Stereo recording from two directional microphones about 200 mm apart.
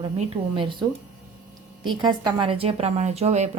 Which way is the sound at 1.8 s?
25° right (ahead or behind).